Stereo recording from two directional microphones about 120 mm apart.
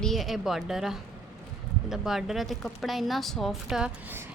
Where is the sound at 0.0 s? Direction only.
Centre (ahead or behind).